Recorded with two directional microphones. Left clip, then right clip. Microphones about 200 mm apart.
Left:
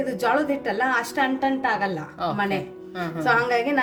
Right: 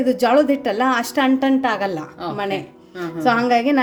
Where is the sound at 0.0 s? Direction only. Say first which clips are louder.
Right 7 dB; 40° right (ahead or behind).